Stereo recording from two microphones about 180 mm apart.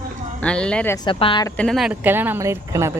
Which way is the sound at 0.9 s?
25° left (ahead or behind).